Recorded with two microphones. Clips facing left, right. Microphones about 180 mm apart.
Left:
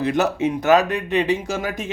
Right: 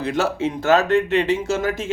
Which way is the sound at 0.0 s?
20° left (ahead or behind).